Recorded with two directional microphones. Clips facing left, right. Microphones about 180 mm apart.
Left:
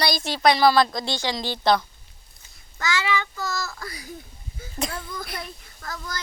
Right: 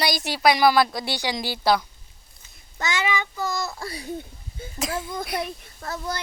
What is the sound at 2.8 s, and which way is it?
A child's voice, 20° right (ahead or behind).